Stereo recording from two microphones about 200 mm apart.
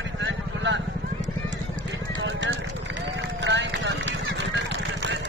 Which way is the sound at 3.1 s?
65° right (ahead or behind).